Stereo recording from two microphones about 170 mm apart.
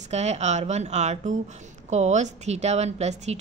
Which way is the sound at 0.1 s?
40° right (ahead or behind).